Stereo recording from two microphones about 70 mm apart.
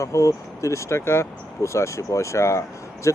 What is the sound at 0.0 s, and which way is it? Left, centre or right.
Speech, left.